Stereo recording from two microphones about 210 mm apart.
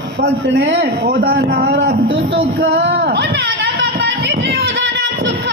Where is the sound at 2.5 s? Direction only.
50° right (ahead or behind).